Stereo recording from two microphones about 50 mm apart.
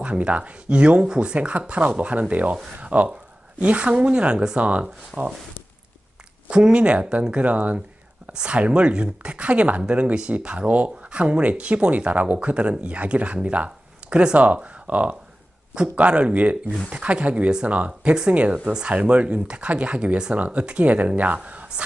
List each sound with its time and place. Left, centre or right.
0.0 s speech: right
6.5 s speech: right